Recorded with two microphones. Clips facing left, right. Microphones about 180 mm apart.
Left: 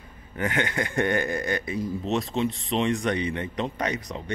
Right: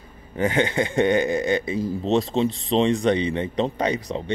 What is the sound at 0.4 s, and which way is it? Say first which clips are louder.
Speech: right 6 dB; 30° right (ahead or behind).